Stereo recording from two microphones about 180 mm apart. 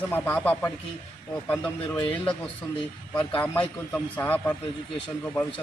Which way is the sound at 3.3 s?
10° left (ahead or behind).